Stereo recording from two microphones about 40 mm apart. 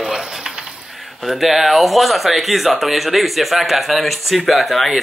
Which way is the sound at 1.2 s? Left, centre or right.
Centre.